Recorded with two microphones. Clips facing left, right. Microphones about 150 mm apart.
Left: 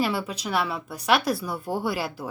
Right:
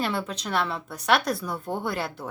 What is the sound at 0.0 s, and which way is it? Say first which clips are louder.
Speech: left 2 dB; 5° left (ahead or behind).